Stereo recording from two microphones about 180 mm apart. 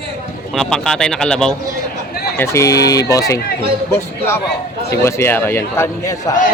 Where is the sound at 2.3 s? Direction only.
15° left (ahead or behind).